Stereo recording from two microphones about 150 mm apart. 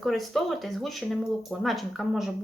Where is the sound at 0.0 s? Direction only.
Centre (ahead or behind).